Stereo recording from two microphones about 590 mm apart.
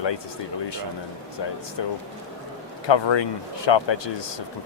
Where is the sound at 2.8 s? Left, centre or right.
Left.